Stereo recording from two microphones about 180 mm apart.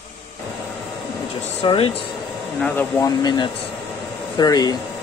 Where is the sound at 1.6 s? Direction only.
30° left (ahead or behind).